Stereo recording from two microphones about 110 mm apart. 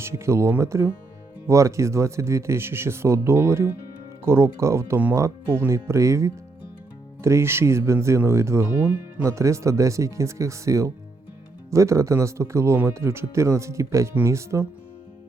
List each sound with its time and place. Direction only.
0.0 s speech: 25° right (ahead or behind)